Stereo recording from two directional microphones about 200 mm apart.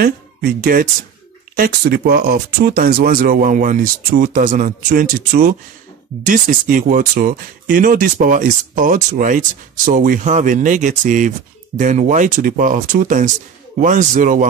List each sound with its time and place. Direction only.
0.0 s speech: 45° right (ahead or behind)